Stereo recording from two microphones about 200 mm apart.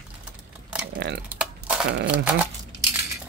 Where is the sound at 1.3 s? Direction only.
5° right (ahead or behind).